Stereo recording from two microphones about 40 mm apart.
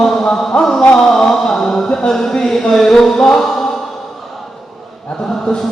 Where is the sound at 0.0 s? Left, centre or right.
Centre.